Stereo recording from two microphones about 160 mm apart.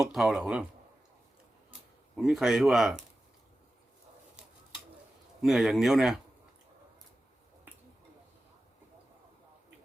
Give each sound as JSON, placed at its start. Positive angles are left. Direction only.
{"t": 0.1, "sound": "speech", "side_deg": -5}
{"t": 2.1, "sound": "speech", "side_deg": 0}
{"t": 5.4, "sound": "speech", "side_deg": 0}